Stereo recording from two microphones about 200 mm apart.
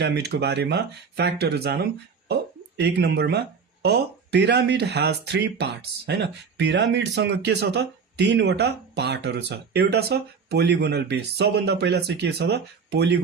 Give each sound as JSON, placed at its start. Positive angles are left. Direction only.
{"t": 0.0, "sound": "speech", "side_deg": -60}